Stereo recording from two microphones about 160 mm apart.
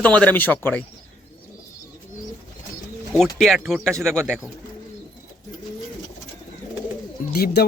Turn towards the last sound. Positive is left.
turn(degrees=75)  # may be behind; listen again after turning